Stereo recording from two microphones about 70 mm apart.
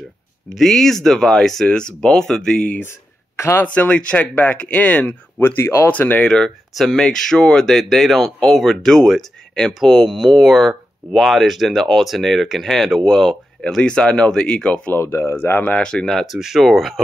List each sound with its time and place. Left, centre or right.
0.6 s speech: centre
2.8 s a sound: left
3.6 s speech: centre
5.6 s speech: left
5.9 s speech: left
6.2 s speech: centre
15.0 s speech: left
15.7 s speech: centre